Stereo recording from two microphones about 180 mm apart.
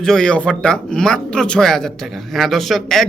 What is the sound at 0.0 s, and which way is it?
Speech, 5° left (ahead or behind).